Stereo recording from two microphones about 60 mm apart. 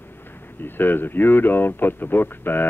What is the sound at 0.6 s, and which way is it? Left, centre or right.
Speech, left.